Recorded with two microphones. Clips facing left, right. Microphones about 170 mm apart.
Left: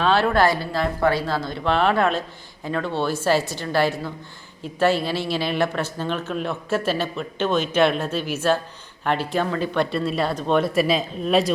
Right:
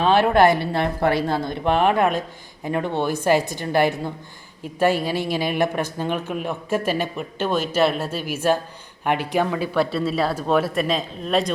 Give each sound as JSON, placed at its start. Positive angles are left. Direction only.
{"t": 0.0, "sound": "a woman's voice", "side_deg": -15}